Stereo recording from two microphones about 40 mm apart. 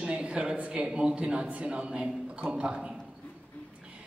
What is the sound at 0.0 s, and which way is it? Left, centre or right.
Speech, right.